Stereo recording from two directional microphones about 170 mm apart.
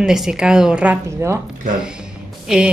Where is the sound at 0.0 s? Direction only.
5° right (ahead or behind).